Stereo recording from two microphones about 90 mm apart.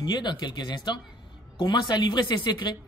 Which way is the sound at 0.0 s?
55° left (ahead or behind).